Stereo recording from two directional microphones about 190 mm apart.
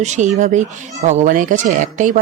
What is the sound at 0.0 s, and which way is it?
Speech, 40° right (ahead or behind).